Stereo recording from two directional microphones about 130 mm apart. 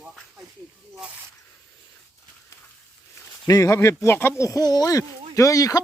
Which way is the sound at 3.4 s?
25° left (ahead or behind).